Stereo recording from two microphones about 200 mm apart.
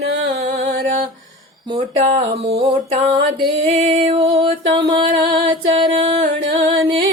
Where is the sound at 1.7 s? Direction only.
30° right (ahead or behind).